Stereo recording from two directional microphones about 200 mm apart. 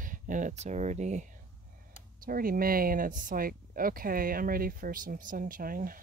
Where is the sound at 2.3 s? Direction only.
45° right (ahead or behind).